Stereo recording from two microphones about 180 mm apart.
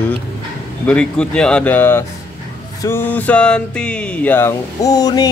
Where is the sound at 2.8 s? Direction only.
10° left (ahead or behind).